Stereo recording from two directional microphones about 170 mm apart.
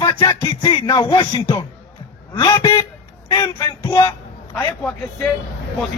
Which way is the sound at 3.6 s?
15° left (ahead or behind).